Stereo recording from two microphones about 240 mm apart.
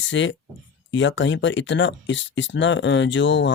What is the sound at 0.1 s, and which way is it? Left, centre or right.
Speech, left.